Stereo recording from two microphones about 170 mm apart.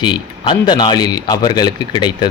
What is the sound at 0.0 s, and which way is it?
A man's voice, 25° left (ahead or behind).